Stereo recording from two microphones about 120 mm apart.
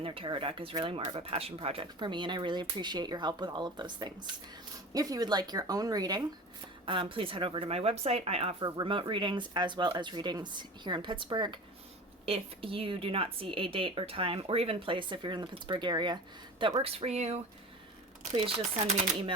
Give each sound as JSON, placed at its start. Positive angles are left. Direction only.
{"t": 0.0, "sound": "speech", "side_deg": -50}
{"t": 6.8, "sound": "speech", "side_deg": -45}
{"t": 8.6, "sound": "speech", "side_deg": -45}
{"t": 12.2, "sound": "speech", "side_deg": -50}
{"t": 16.8, "sound": "speech", "side_deg": -60}
{"t": 18.3, "sound": "speech", "side_deg": -50}